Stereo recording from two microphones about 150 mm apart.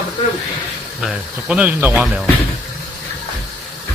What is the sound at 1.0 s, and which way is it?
Speech, 5° right (ahead or behind).